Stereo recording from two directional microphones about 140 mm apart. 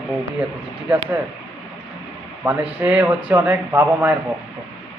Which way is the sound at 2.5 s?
10° right (ahead or behind).